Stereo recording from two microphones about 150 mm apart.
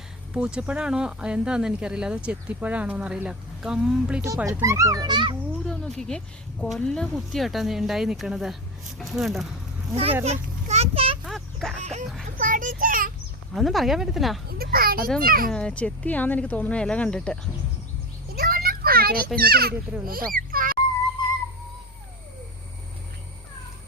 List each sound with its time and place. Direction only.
0.3 s speech: 5° right (ahead or behind)
4.4 s a child's voice: 20° right (ahead or behind)
5.6 s speech: 5° left (ahead or behind)
9.9 s speech: 40° right (ahead or behind)
10.2 s children playing: 45° right (ahead or behind)
11.3 s a sound: centre (ahead or behind)
11.8 s a sound: 50° right (ahead or behind)
12.4 s child singing: 65° right (ahead or behind)
13.5 s speech: centre (ahead or behind)
14.6 s a child's voice: 85° right; by 15.4 s 70° right (ahead or behind)
15.4 s speech: 5° left (ahead or behind)
18.3 s children playing: 75° right (ahead or behind)
19.4 s a child's voice: 90° right; by 20.7 s 70° right (ahead or behind)